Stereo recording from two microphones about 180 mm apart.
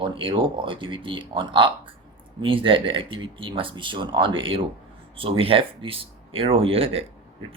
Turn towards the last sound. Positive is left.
turn(degrees=-30)  # may be behind; listen again after turning